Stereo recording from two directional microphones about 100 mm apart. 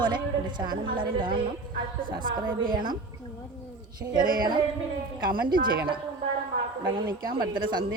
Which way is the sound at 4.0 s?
45° right (ahead or behind).